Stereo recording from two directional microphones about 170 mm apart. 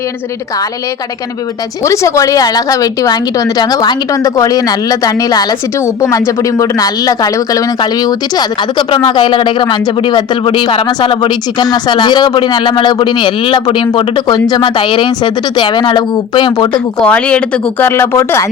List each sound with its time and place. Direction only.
1.8 s speech: 15° left (ahead or behind)
17.0 s speech: 5° left (ahead or behind)